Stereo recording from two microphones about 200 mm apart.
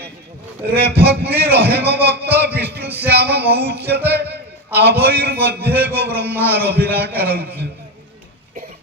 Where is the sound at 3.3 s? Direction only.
55° right (ahead or behind).